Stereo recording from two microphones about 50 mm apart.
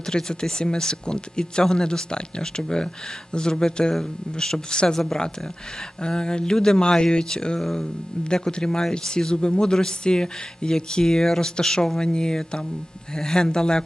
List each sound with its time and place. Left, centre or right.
0.0 s speech: centre
7.6 s speech: centre
8.2 s speech: centre